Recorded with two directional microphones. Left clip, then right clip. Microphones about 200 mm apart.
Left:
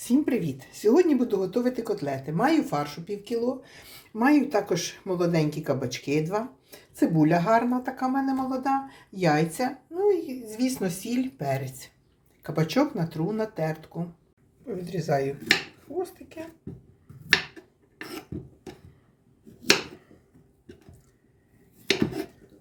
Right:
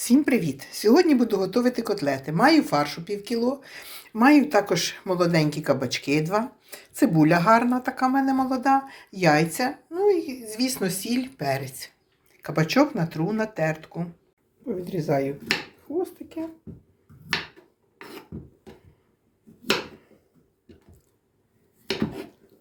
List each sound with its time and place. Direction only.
0.0 s speech: 5° left (ahead or behind)
14.8 s a woman's voice: 30° right (ahead or behind)